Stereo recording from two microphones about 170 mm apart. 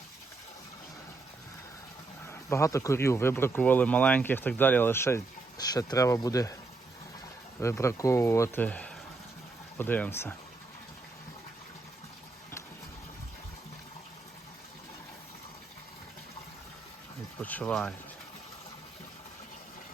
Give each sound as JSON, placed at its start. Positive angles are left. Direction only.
{"t": 2.2, "sound": "speech", "side_deg": 15}
{"t": 7.6, "sound": "speech", "side_deg": 15}
{"t": 17.4, "sound": "speech", "side_deg": 5}